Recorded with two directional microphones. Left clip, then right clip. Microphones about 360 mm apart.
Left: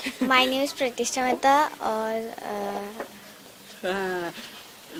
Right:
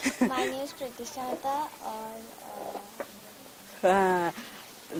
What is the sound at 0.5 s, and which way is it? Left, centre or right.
Speech, left.